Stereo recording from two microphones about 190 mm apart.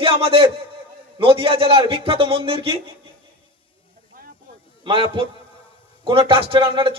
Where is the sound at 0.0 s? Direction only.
30° right (ahead or behind).